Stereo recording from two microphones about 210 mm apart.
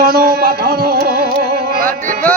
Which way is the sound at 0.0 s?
45° right (ahead or behind).